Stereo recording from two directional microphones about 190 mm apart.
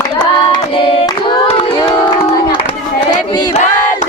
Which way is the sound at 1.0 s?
25° left (ahead or behind).